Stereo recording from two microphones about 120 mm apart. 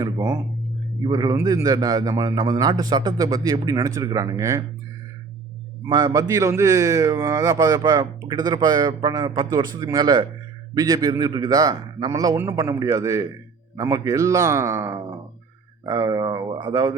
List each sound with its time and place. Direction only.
0.0 s a man's voice: 25° right (ahead or behind)
5.9 s a man's voice: 35° right (ahead or behind)
16.5 s a man's voice: 40° right (ahead or behind)